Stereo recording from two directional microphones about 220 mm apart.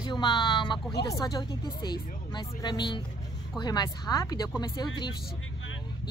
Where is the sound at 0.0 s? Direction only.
20° left (ahead or behind).